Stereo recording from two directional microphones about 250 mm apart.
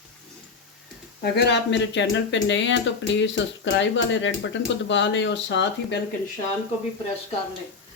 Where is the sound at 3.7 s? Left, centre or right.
Left.